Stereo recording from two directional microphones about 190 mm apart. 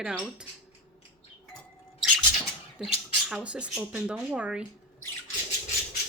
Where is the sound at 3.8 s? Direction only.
5° right (ahead or behind).